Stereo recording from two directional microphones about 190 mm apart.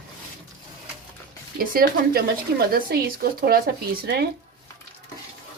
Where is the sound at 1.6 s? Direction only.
50° right (ahead or behind).